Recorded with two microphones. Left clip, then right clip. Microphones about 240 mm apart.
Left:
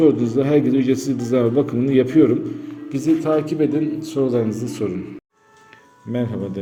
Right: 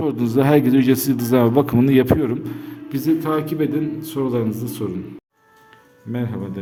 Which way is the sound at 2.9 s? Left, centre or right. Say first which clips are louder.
Left 2 dB; centre.